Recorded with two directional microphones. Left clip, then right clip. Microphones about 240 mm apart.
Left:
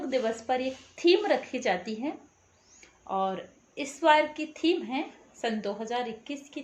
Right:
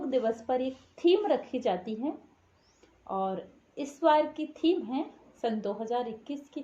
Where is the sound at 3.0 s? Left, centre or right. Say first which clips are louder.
Left 2 dB; centre.